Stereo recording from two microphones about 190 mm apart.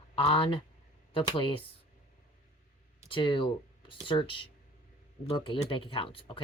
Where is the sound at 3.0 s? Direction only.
25° left (ahead or behind).